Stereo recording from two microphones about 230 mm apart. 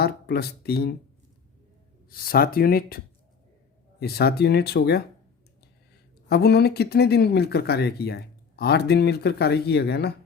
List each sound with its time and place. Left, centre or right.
0.0 s speech: left
2.0 s speech: left
4.0 s speech: left
6.2 s speech: left